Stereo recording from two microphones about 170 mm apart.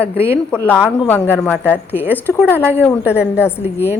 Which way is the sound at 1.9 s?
10° right (ahead or behind).